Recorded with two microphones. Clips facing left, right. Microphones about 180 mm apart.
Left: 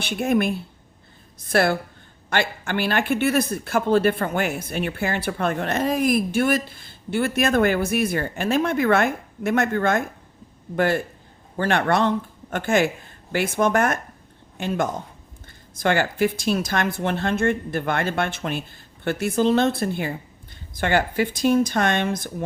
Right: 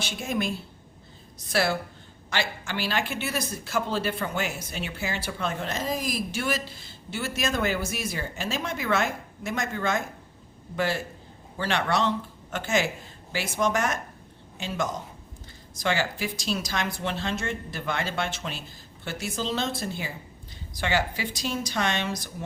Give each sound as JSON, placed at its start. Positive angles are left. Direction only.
{"t": 0.0, "sound": "speech", "side_deg": 60}